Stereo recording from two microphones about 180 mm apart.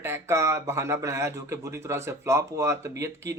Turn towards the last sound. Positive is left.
turn(degrees=-15)  # may be behind; listen again after turning